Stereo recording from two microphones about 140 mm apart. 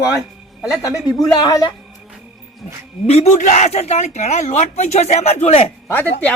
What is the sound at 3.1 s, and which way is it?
A man's voice, 50° left (ahead or behind).